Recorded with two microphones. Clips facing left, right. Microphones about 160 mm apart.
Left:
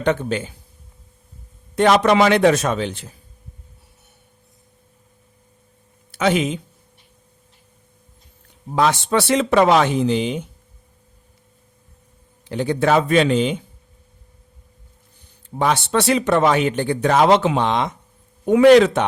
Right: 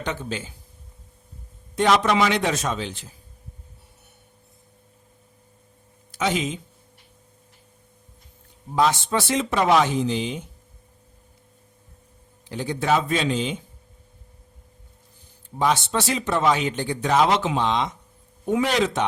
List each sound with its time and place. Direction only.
0.0 s speech: 60° left (ahead or behind)
1.7 s speech: 60° left (ahead or behind)
6.1 s speech: 60° left (ahead or behind)
8.7 s speech: 70° left (ahead or behind)
12.5 s speech: 60° left (ahead or behind)
15.5 s speech: 65° left (ahead or behind)